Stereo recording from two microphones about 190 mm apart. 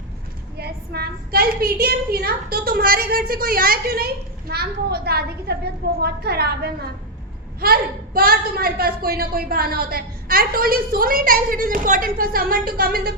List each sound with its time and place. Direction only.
0.5 s a woman's voice: 55° right (ahead or behind)